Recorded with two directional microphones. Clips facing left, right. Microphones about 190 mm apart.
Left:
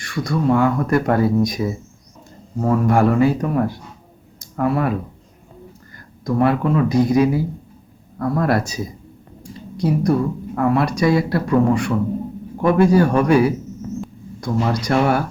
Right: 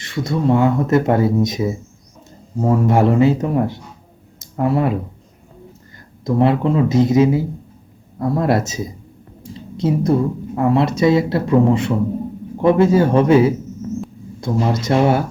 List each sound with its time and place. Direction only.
0.0 s speech: 25° right (ahead or behind)
4.4 s a sound: 20° right (ahead or behind)
6.2 s speech: 25° right (ahead or behind)